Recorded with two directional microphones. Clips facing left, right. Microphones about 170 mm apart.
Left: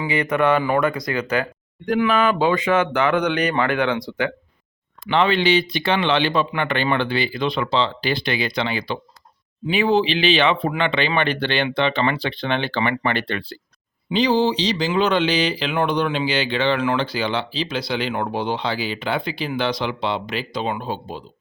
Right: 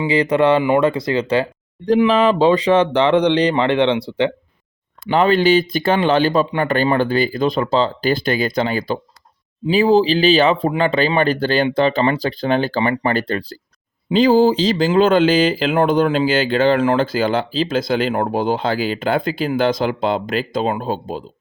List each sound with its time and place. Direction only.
0.0 s speech: 30° right (ahead or behind)
5.0 s speech: 40° right (ahead or behind)